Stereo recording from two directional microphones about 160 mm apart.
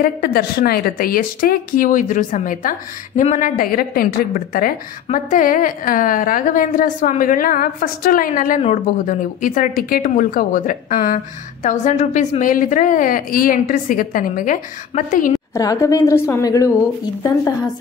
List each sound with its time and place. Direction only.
0.0 s a woman's voice: 70° left (ahead or behind); by 15.3 s 55° left (ahead or behind)
15.3 s a woman's voice: 20° left (ahead or behind)